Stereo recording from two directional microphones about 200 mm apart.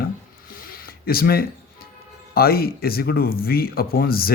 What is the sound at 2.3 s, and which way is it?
Speech, 50° left (ahead or behind).